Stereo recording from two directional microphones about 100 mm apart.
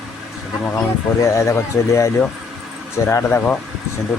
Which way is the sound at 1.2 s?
30° left (ahead or behind).